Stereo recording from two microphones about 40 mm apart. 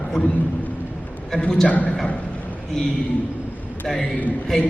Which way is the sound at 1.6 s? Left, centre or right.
Left.